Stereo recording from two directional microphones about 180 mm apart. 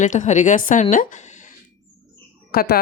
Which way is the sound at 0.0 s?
40° left (ahead or behind).